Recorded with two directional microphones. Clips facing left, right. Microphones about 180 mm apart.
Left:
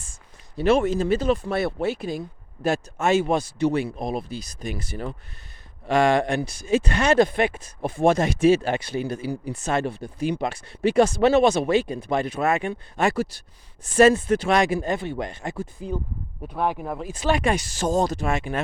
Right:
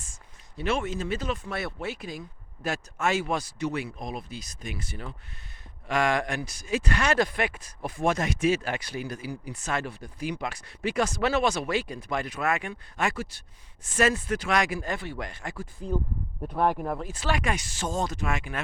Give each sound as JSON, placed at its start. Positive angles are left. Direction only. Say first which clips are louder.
{"t": 0.0, "sound": "speech", "louder": "left 2 dB", "side_deg": 35}
{"t": 16.4, "sound": "speech", "louder": "even", "side_deg": 5}
{"t": 17.1, "sound": "speech", "louder": "left 10 dB", "side_deg": 20}